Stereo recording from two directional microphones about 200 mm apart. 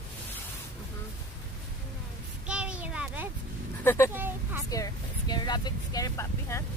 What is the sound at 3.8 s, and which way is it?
Speech, 15° left (ahead or behind).